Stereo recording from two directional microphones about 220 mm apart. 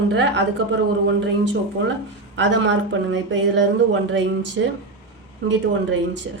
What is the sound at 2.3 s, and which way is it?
A woman's voice, 55° right (ahead or behind).